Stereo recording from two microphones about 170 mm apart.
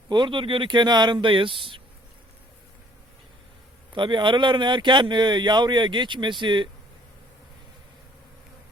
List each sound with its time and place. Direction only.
0.1 s speech: 30° right (ahead or behind)
3.9 s speech: 30° right (ahead or behind)